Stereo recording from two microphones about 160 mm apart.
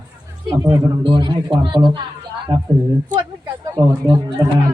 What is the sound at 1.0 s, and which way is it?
Speech, 30° right (ahead or behind).